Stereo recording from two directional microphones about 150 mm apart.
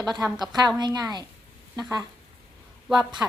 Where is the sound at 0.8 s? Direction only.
30° right (ahead or behind).